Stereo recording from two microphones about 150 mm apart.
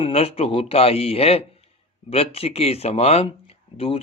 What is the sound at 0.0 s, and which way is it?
A man's voice, 40° left (ahead or behind).